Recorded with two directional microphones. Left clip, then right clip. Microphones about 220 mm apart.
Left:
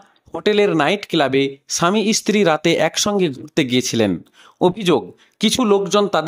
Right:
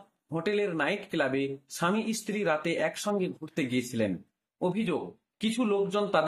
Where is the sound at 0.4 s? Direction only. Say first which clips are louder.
Left 13 dB; 45° left (ahead or behind).